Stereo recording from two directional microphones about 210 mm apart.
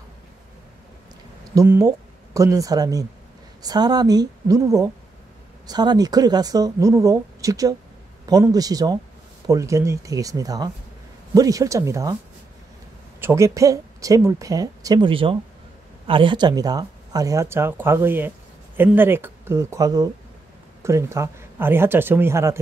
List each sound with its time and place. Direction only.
1.5 s a woman's voice: 15° right (ahead or behind)
13.2 s speech: 15° right (ahead or behind)